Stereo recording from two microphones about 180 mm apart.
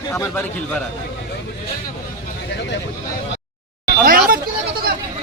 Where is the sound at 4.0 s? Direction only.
50° right (ahead or behind).